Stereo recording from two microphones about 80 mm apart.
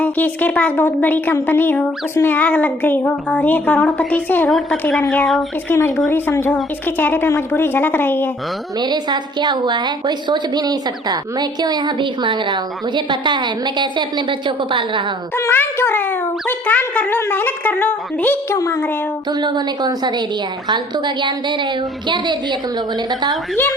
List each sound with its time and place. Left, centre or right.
0.0 s a woman's voice: left
4.4 s a woman's voice: centre
6.1 s a woman's voice: left
8.8 s a woman's voice: right
13.1 s a woman's voice: right
15.4 s a woman's voice: left
18.5 s speech: left
19.4 s a woman's voice: right
19.8 s a woman's voice: right